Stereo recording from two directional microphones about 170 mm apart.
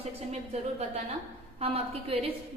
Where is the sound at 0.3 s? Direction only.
40° right (ahead or behind).